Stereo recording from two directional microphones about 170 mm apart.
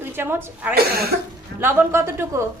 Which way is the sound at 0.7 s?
65° right (ahead or behind).